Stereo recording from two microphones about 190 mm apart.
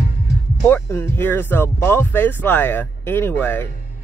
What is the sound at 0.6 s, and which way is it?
Speech, 10° left (ahead or behind).